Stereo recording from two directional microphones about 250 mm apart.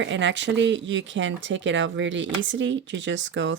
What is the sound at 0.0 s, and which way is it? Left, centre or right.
Speech, right.